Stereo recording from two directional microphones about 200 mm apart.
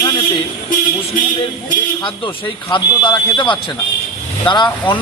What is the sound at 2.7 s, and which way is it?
Speech, 20° left (ahead or behind).